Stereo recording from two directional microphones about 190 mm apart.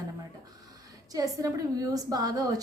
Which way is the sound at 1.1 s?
15° right (ahead or behind).